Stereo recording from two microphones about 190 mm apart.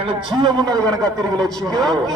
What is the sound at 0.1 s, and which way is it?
Speech, 25° right (ahead or behind).